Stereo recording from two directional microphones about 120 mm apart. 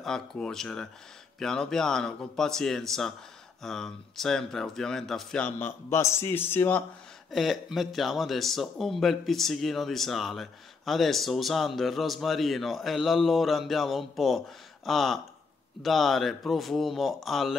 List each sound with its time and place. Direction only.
0.0 s speech: 5° left (ahead or behind)
5.6 s a man's voice: 20° left (ahead or behind)
7.2 s speech: centre (ahead or behind)